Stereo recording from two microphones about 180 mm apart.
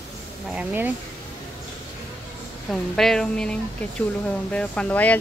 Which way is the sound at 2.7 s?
Centre (ahead or behind).